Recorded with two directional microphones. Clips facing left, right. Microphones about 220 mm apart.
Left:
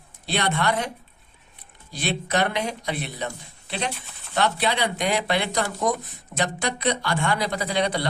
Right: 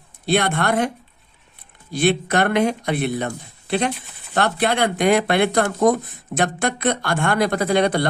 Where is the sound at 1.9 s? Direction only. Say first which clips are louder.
Right 7 dB; 55° right (ahead or behind).